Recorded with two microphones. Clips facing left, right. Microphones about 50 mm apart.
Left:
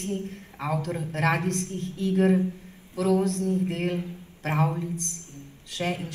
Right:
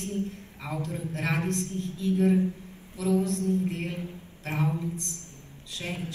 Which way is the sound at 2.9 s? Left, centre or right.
Left.